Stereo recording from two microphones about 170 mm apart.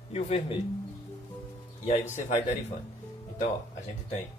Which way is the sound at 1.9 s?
40° left (ahead or behind).